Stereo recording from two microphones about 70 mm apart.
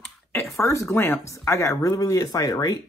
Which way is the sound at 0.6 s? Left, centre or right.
Left.